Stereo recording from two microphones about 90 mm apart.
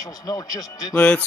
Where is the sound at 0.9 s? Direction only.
15° left (ahead or behind).